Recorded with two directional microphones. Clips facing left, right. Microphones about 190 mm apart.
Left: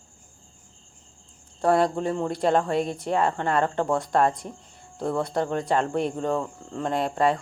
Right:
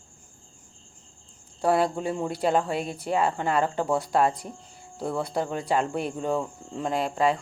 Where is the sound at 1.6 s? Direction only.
5° right (ahead or behind).